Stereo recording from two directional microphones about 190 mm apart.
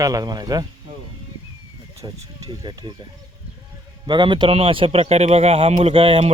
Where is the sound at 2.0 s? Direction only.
20° right (ahead or behind).